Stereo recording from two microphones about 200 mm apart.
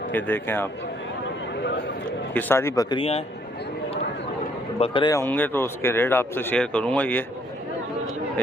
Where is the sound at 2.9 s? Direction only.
30° left (ahead or behind).